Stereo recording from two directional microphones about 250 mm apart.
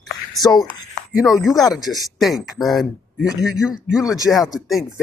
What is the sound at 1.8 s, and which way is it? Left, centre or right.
Speech, centre.